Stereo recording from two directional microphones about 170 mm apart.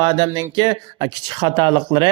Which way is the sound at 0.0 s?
25° right (ahead or behind).